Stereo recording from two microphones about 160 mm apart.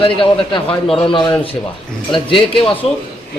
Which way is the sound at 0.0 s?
35° left (ahead or behind).